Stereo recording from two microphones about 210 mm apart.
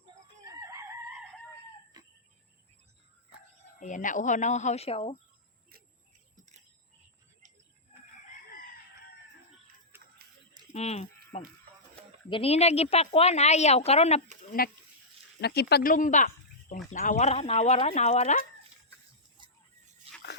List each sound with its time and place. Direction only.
0.4 s chicken: 15° right (ahead or behind)
2.0 s cricket: 20° right (ahead or behind)
3.8 s speech: 35° left (ahead or behind)
9.9 s a sound: 10° right (ahead or behind)
10.7 s a woman's voice: 30° left (ahead or behind)
14.6 s speech: 45° left (ahead or behind)
19.4 s a sound: 20° right (ahead or behind)
20.1 s dog: 30° right (ahead or behind)